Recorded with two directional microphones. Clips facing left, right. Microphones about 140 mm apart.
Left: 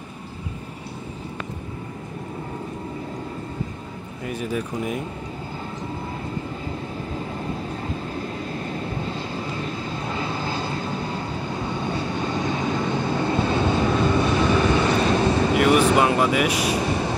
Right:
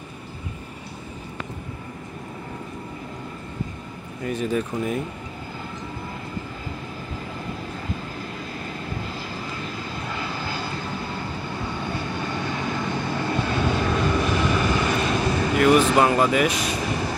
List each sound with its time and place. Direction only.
4.3 s speech: 10° left (ahead or behind)
10.0 s vehicle: 25° left (ahead or behind)
12.2 s vehicle: 20° left (ahead or behind)
15.5 s vehicle: 15° left (ahead or behind)